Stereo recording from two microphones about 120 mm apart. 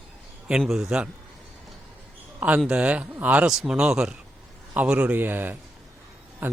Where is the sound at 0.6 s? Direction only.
Centre (ahead or behind).